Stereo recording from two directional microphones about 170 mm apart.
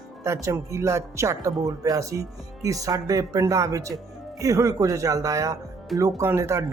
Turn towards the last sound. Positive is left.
turn(degrees=-15)  # may be behind; listen again after turning